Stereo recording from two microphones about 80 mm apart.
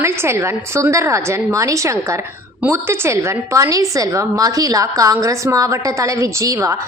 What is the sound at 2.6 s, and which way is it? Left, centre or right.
A woman's voice, right.